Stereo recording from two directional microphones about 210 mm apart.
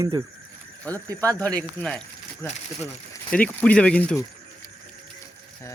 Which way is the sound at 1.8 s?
5° left (ahead or behind).